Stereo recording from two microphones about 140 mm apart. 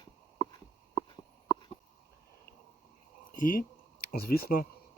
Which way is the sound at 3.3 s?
75° left (ahead or behind).